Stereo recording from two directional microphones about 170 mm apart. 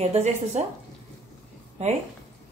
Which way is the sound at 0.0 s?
40° right (ahead or behind).